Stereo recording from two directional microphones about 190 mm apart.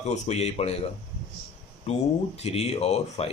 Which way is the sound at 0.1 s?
35° left (ahead or behind).